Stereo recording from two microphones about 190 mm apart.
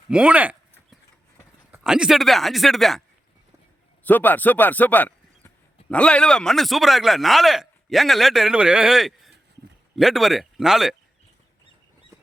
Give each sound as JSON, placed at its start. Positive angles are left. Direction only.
{"t": 0.1, "sound": "a sound", "side_deg": -5}
{"t": 1.7, "sound": "speech", "side_deg": -5}
{"t": 4.0, "sound": "a man's voice", "side_deg": 10}